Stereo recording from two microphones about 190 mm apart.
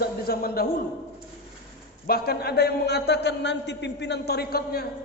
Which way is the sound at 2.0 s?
55° left (ahead or behind).